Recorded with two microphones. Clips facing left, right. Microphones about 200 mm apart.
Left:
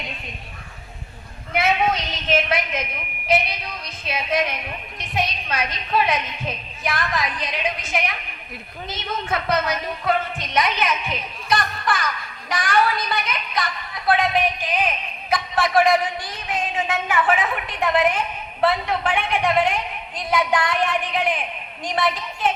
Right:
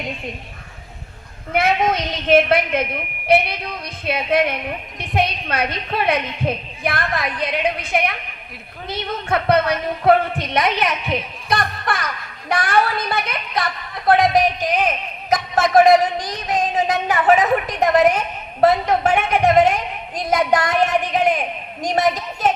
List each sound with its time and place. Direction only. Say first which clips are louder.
1.5 s a woman's voice: right 3 dB; 55° right (ahead or behind)
14.1 s a man's voice: right 5 dB; 40° right (ahead or behind)